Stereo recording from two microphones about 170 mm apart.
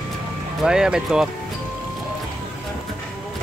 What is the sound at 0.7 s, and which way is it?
Speech, 5° right (ahead or behind).